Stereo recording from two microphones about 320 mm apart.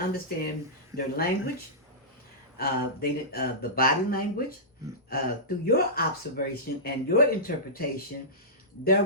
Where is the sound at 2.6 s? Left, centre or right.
Left.